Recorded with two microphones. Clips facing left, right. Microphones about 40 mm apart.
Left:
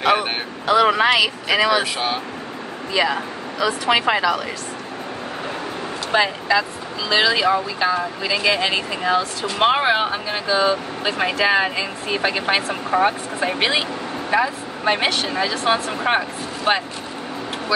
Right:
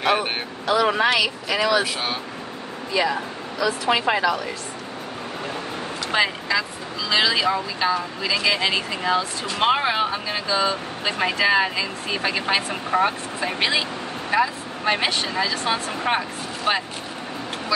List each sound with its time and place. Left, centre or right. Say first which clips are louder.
0.0 s vehicle: left 3 dB; left
0.7 s speech: left 4 dB; left
2.9 s speech: left 2 dB; left
6.1 s speech: left 4 dB; centre
7.1 s speech: left 3 dB; centre
9.8 s speech: left 3 dB; left
12.9 s speech: left 2 dB; centre
13.6 s speech: left 1 dB; left
14.3 s speech: left 1 dB; centre